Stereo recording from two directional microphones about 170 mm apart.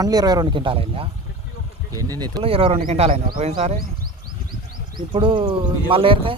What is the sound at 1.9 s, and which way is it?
Speech, 20° right (ahead or behind).